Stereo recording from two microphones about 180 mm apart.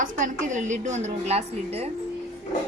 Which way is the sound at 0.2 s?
45° right (ahead or behind).